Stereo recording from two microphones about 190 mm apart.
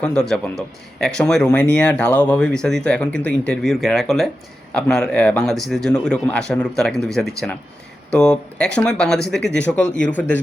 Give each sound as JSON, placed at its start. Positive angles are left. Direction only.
{"t": 0.0, "sound": "speech", "side_deg": 5}
{"t": 9.4, "sound": "speech", "side_deg": 65}
{"t": 10.1, "sound": "speech", "side_deg": 10}